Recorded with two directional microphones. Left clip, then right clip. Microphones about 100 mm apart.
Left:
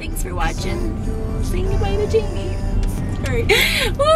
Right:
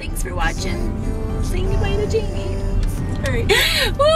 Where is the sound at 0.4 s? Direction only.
Centre (ahead or behind).